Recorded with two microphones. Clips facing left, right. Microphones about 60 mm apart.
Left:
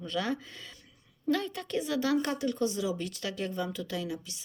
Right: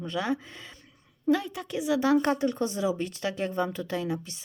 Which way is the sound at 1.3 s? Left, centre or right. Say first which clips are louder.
Right 4 dB; centre.